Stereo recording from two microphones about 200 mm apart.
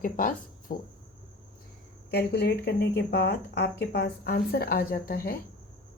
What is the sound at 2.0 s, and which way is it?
Speech, 55° left (ahead or behind).